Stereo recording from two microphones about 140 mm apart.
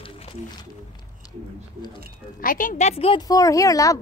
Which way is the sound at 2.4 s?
75° left (ahead or behind).